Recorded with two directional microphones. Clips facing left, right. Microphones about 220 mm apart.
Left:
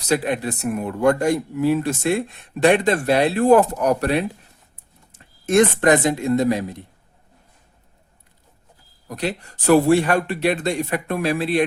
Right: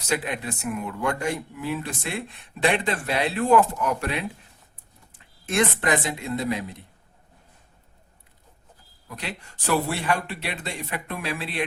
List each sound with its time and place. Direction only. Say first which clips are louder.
0.1 s speech: left 7 dB; 40° left (ahead or behind)
9.0 s a man's voice: left 10 dB; 40° left (ahead or behind)